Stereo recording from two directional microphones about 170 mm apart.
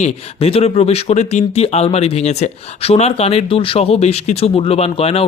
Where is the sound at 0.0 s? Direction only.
35° left (ahead or behind).